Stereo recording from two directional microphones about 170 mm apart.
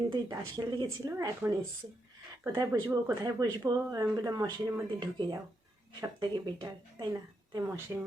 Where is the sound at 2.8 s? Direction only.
20° right (ahead or behind).